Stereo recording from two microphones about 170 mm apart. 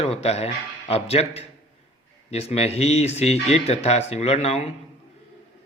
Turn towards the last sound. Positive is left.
turn(degrees=35)  # may be behind; listen again after turning